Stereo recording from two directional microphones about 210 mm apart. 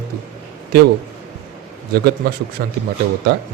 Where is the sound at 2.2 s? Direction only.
45° right (ahead or behind).